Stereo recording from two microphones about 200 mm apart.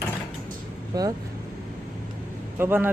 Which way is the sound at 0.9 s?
20° right (ahead or behind).